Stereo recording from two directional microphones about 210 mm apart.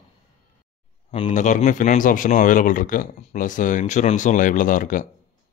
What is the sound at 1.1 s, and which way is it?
Speech, 30° left (ahead or behind).